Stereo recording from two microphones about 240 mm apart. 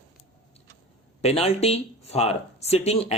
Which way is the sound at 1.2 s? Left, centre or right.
Left.